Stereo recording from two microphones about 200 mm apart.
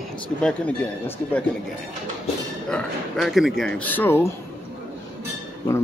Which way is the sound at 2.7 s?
Centre (ahead or behind).